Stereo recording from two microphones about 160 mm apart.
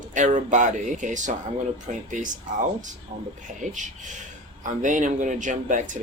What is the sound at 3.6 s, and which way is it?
Speech, 50° right (ahead or behind).